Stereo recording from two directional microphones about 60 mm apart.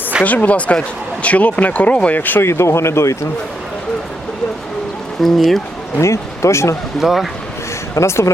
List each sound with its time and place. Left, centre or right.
0.3 s speech: left
2.5 s speech: left
5.2 s speech: centre
6.0 s speech: left
7.0 s speech: centre
7.9 s speech: left